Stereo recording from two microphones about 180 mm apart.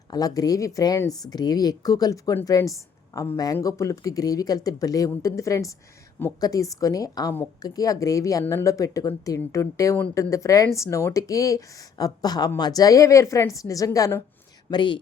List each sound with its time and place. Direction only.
0.1 s speech: 20° left (ahead or behind)